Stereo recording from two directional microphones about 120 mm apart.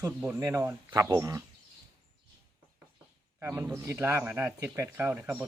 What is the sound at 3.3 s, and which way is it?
Speech, 20° right (ahead or behind).